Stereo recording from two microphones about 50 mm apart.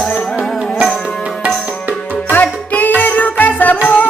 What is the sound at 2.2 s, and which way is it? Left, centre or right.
Music, left.